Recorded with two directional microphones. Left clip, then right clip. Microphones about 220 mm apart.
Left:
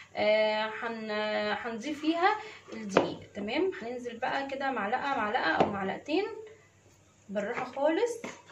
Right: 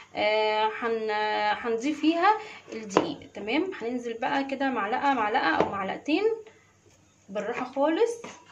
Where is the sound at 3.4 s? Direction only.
50° right (ahead or behind).